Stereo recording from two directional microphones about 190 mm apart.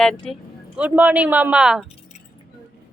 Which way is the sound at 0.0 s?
5° left (ahead or behind).